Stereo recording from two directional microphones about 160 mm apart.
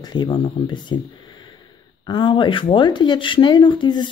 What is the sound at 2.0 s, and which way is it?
Speech, 30° left (ahead or behind).